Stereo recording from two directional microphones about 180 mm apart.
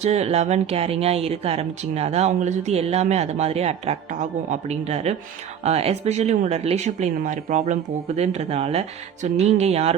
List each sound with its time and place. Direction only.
0.0 s speech: 35° right (ahead or behind)